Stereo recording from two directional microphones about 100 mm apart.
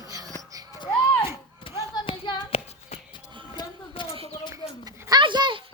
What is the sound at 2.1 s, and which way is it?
Music, 50° left (ahead or behind).